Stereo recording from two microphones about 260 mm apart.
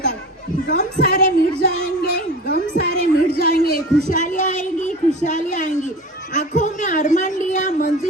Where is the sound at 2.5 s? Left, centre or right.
Left.